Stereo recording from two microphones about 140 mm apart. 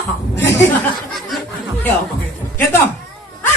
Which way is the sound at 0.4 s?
20° left (ahead or behind).